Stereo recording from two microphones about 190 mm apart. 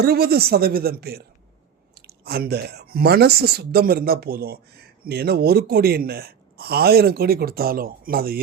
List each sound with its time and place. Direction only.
0.0 s speech: 55° right (ahead or behind)